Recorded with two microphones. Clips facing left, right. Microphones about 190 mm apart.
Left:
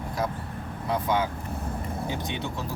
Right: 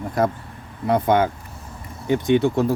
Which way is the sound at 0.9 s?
60° right (ahead or behind).